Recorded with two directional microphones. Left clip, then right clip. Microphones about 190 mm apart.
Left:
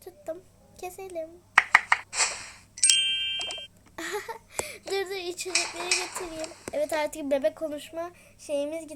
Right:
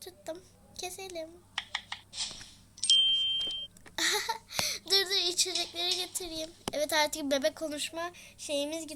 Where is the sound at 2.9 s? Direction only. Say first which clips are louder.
Right 1 dB; 60° left (ahead or behind).